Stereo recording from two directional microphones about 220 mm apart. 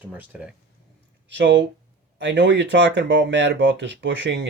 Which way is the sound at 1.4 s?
55° right (ahead or behind).